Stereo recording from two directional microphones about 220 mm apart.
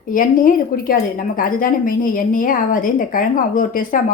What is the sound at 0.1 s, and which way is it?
A woman's voice, 40° left (ahead or behind).